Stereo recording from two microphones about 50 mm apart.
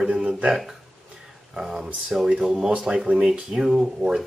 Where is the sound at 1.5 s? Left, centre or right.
Centre.